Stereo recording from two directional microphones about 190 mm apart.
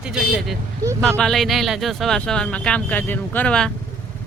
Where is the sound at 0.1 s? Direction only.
5° right (ahead or behind).